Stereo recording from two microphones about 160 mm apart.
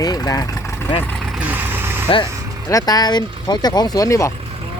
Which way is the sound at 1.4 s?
10° right (ahead or behind).